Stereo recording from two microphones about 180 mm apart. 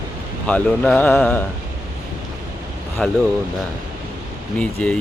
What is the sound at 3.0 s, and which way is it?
Speech, 5° left (ahead or behind).